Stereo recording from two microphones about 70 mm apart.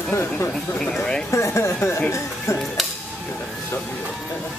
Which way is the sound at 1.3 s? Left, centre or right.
Left.